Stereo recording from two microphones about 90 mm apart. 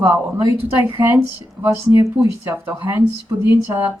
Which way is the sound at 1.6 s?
35° right (ahead or behind).